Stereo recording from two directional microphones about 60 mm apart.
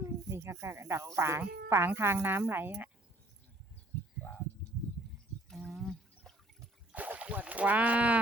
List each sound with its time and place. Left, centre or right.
0.0 s speech: right
5.5 s a sound: centre
6.9 s speech: right